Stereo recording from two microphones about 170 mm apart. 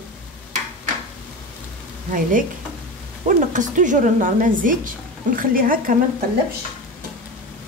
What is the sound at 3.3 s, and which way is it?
A woman's voice, 50° right (ahead or behind).